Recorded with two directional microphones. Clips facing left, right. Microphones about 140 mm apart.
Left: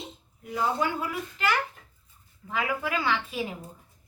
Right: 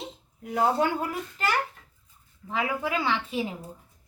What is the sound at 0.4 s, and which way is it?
Speech, 60° right (ahead or behind).